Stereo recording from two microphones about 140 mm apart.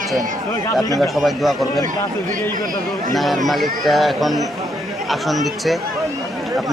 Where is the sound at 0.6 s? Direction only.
25° left (ahead or behind).